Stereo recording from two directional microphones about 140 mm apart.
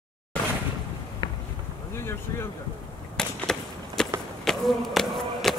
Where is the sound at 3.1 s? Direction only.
5° left (ahead or behind).